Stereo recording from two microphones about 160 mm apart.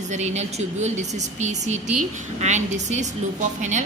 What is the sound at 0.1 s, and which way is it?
A woman's voice, 45° right (ahead or behind).